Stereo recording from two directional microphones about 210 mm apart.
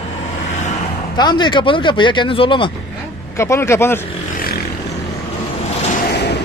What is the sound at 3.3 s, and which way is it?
Speech, 15° left (ahead or behind).